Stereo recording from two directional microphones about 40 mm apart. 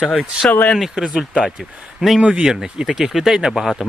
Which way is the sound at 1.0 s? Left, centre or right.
Right.